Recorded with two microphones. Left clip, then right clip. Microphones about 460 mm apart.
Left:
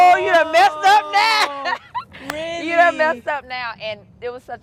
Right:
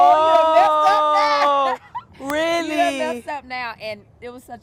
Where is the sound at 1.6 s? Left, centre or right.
Left.